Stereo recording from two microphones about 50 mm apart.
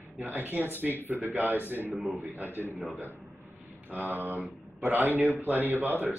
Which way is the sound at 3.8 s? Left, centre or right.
Right.